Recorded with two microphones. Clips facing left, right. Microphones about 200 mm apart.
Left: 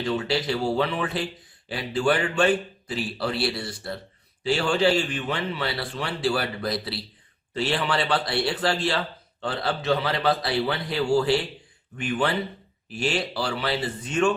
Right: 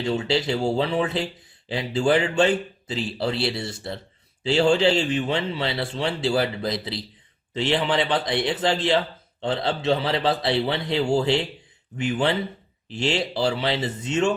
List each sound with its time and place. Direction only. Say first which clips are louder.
0.0 s speech: right 2 dB; 25° right (ahead or behind)